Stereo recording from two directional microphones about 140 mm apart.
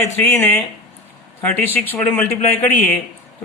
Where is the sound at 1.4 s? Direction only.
10° left (ahead or behind).